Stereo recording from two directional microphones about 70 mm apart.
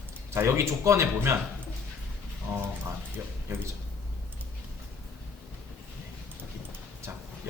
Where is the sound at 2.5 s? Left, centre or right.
Right.